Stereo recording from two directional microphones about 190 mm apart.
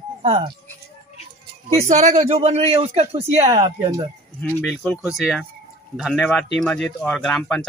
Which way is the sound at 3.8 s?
15° right (ahead or behind).